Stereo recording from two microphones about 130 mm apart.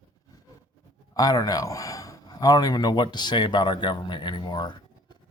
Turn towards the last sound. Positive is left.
turn(degrees=35)  # may be behind; listen again after turning